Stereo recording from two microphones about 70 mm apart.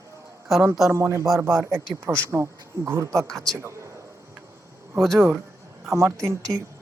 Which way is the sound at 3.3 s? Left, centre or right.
Centre.